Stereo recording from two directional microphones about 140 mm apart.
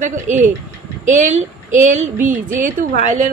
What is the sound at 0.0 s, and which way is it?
Speech, 60° right (ahead or behind).